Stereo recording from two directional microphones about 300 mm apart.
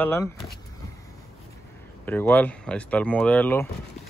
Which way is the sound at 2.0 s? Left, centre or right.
Centre.